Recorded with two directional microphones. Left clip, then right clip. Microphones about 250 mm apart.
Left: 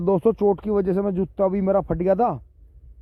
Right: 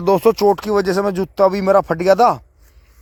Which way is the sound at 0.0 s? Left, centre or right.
Centre.